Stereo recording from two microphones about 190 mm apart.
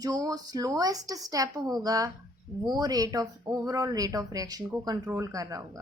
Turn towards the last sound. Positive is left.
turn(degrees=-15)  # may be behind; listen again after turning